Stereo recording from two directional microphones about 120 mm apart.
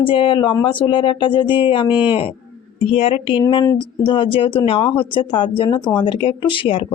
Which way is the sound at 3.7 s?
40° left (ahead or behind).